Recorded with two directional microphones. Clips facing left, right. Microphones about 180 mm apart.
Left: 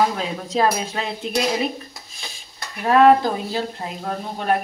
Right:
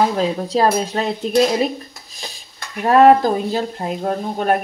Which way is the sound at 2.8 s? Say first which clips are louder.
Right 3 dB; 45° right (ahead or behind).